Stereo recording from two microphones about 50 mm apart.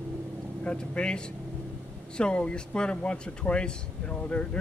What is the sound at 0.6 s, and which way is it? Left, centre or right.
Speech, centre.